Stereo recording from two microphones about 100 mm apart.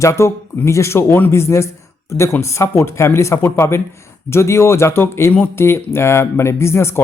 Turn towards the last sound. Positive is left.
turn(degrees=25)  # may be behind; listen again after turning